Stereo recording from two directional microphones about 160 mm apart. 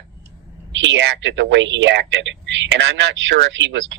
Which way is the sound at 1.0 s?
90° right.